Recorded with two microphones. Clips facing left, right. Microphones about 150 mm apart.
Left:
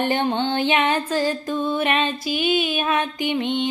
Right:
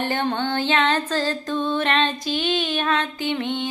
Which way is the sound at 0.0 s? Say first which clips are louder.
Left 2 dB; 15° left (ahead or behind).